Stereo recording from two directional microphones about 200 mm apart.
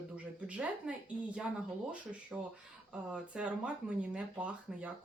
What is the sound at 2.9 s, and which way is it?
Speech, 5° right (ahead or behind).